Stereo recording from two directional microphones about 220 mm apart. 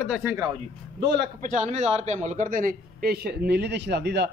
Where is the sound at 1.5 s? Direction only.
30° right (ahead or behind).